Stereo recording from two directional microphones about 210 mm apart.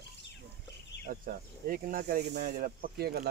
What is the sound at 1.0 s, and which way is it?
Speech, 40° right (ahead or behind).